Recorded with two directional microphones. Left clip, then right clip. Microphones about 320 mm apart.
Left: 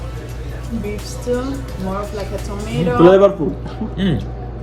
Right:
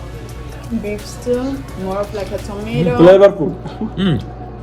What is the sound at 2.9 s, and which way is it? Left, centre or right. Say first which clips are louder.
Speech: right 3 dB; right.